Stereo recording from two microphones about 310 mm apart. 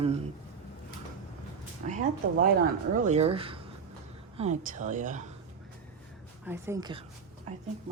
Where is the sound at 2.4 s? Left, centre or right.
Right.